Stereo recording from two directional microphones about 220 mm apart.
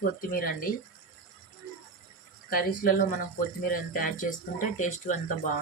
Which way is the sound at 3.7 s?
40° left (ahead or behind).